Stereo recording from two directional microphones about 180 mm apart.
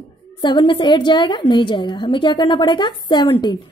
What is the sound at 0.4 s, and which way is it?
A woman's voice, 25° left (ahead or behind).